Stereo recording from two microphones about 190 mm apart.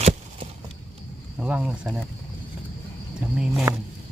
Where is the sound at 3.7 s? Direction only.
15° right (ahead or behind).